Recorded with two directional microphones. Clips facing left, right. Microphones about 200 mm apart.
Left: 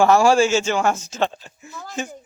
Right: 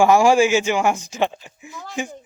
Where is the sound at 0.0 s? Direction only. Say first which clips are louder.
Right 1 dB; 15° right (ahead or behind).